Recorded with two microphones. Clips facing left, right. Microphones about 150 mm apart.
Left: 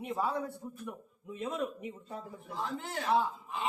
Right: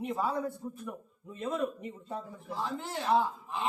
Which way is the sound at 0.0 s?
Centre (ahead or behind).